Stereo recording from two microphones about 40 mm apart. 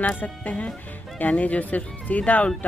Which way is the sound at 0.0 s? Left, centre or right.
Left.